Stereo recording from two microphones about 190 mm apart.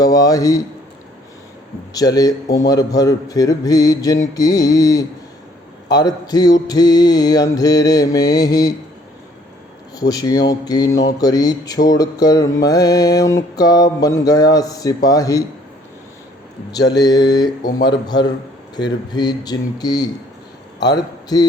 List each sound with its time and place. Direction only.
0.0 s mantra: 20° left (ahead or behind)
1.9 s mantra: 20° left (ahead or behind)
9.9 s mantra: 20° left (ahead or behind)
16.7 s mantra: 20° left (ahead or behind)
20.7 s a man's voice: 20° left (ahead or behind)